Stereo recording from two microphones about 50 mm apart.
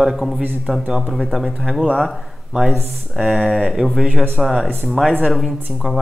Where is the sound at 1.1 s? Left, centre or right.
Centre.